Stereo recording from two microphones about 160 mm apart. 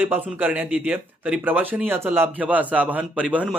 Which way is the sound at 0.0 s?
10° right (ahead or behind).